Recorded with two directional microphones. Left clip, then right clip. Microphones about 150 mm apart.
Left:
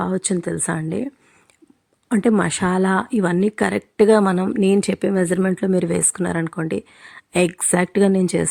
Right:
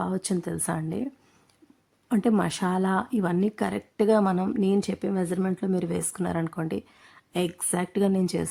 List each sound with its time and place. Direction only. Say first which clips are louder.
0.0 s speech: left 7 dB; 20° left (ahead or behind)
7.0 s speech: left 11 dB; 35° left (ahead or behind)